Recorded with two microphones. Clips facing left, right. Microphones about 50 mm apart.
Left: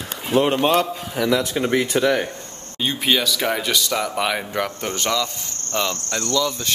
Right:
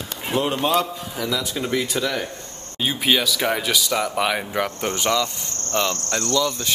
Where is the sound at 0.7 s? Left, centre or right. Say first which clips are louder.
Left 2 dB; left.